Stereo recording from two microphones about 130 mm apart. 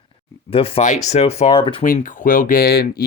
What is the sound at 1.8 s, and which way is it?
Speech, 90° left.